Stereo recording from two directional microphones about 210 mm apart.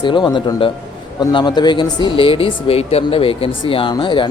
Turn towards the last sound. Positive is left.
turn(degrees=25)  # may be behind; listen again after turning